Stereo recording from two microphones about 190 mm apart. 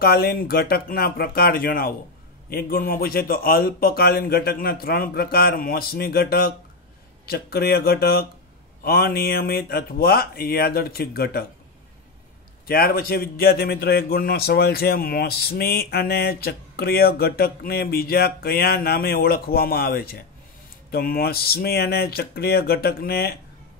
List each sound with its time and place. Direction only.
0.0 s a man's voice: 55° left (ahead or behind)
12.6 s a man's voice: 50° left (ahead or behind)